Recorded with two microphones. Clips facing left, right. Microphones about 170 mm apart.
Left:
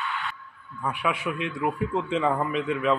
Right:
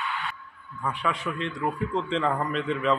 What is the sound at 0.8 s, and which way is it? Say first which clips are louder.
A man's voice: left 1 dB; 10° left (ahead or behind).